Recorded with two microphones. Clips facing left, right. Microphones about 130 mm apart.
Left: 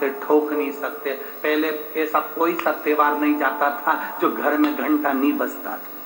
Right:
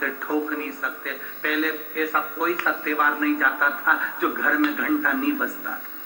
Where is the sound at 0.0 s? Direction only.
45° left (ahead or behind).